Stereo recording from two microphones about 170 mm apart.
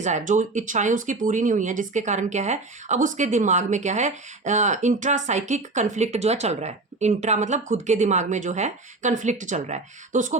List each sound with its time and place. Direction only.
0.0 s speech: 45° right (ahead or behind)